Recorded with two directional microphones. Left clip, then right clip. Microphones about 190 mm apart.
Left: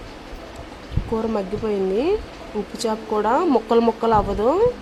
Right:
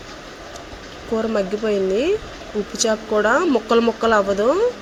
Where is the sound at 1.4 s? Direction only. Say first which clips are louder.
Right 3 dB; 5° left (ahead or behind).